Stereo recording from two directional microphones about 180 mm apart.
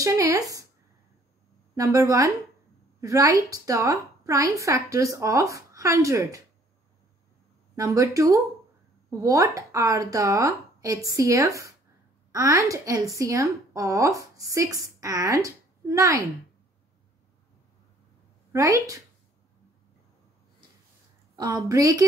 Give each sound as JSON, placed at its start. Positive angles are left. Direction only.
{"t": 0.0, "sound": "speech", "side_deg": -15}
{"t": 1.8, "sound": "a woman's voice", "side_deg": -20}
{"t": 7.7, "sound": "a woman's voice", "side_deg": -20}
{"t": 18.5, "sound": "a woman's voice", "side_deg": -15}
{"t": 21.4, "sound": "speech", "side_deg": -20}